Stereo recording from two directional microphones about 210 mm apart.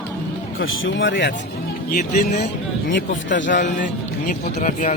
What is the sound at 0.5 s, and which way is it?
Speech, 70° left (ahead or behind).